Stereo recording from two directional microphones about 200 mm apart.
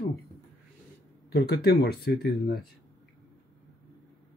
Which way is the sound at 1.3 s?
55° left (ahead or behind).